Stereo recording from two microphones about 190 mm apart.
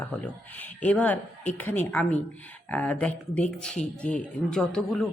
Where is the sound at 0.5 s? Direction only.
10° left (ahead or behind).